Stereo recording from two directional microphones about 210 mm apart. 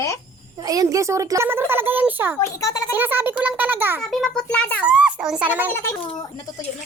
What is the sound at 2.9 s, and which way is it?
A child's voice, 10° right (ahead or behind).